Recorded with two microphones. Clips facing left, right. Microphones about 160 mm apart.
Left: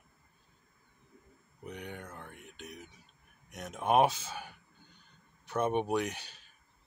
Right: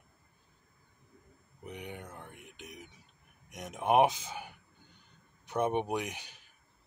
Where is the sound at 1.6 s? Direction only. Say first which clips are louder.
Even; 15° right (ahead or behind).